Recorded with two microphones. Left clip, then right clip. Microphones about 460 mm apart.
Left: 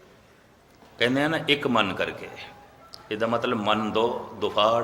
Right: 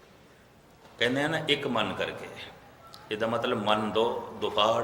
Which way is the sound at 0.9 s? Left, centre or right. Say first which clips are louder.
Left 4 dB; centre.